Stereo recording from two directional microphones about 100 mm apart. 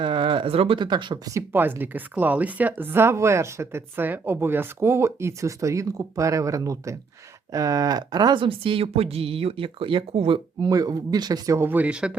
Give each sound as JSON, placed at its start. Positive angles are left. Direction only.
{"t": 0.0, "sound": "a sound", "side_deg": -55}
{"t": 0.8, "sound": "speech", "side_deg": -50}
{"t": 1.5, "sound": "speech", "side_deg": -20}
{"t": 8.4, "sound": "speech", "side_deg": -60}
{"t": 10.7, "sound": "speech", "side_deg": -40}
{"t": 11.6, "sound": "speech", "side_deg": -15}